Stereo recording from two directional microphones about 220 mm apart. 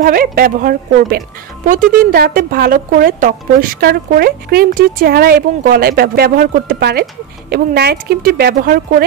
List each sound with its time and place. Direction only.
0.0 s speech: 40° right (ahead or behind)